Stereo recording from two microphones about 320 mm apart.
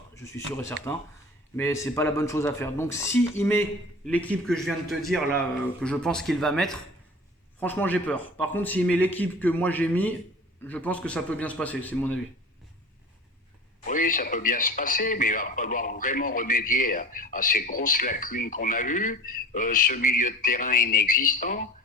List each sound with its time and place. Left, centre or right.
0.2 s speech: centre
13.8 s speech: left